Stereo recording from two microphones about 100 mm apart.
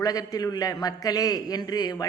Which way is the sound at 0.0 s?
40° left (ahead or behind).